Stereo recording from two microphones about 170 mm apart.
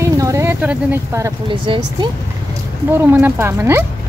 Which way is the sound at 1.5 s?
30° right (ahead or behind).